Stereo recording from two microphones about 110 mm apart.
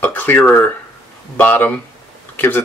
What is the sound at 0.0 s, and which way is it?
Speech, 15° left (ahead or behind).